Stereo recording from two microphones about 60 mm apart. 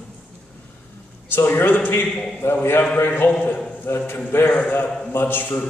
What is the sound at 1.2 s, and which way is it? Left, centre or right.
Speech, left.